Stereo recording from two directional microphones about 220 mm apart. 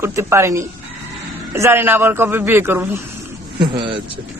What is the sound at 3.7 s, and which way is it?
Speech, 25° right (ahead or behind).